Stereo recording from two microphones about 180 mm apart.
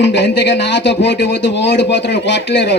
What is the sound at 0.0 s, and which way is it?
Speech, 75° left (ahead or behind).